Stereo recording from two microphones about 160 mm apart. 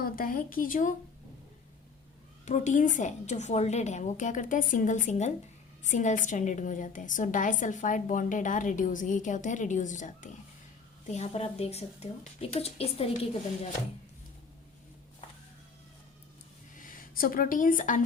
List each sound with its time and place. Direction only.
0.0 s speech: 60° left (ahead or behind)
2.4 s a woman's voice: 50° left (ahead or behind)
16.7 s speech: 55° left (ahead or behind)